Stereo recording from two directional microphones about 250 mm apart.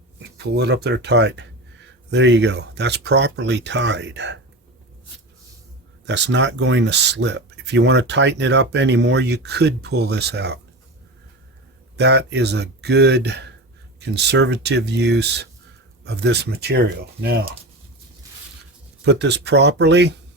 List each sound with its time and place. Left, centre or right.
0.2 s speech: right
6.1 s speech: right
11.9 s speech: right
19.0 s speech: right